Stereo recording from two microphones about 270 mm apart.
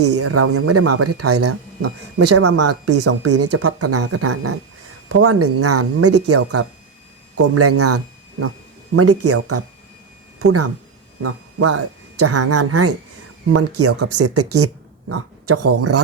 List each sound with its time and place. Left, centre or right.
0.0 s speech: right